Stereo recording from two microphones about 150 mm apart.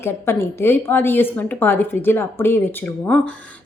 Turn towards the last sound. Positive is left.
turn(degrees=10)  # may be behind; listen again after turning